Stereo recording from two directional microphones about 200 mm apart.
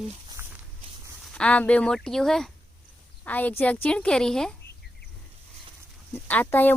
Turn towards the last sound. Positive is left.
turn(degrees=10)  # may be behind; listen again after turning